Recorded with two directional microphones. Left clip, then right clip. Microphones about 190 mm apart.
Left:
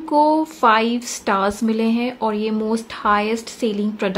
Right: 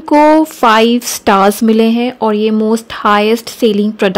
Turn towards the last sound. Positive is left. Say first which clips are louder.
# right 10 dB
turn(degrees=-45)  # may be behind; listen again after turning